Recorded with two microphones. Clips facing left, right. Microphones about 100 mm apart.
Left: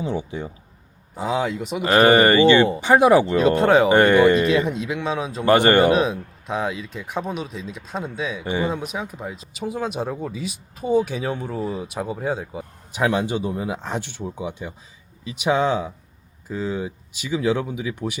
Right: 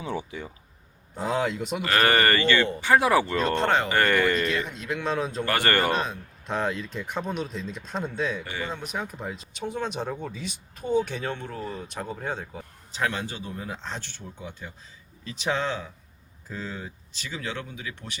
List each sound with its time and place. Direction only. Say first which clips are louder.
1.1 s speech: left 3 dB; centre (ahead or behind)
1.8 s speech: left 8 dB; 25° left (ahead or behind)
4.5 s speech: left 8 dB; centre (ahead or behind)
5.5 s speech: left 12 dB; 20° left (ahead or behind)
6.0 s speech: left 9 dB; 5° left (ahead or behind)
8.4 s speech: left 10 dB; 20° left (ahead or behind)
8.7 s speech: left 5 dB; centre (ahead or behind)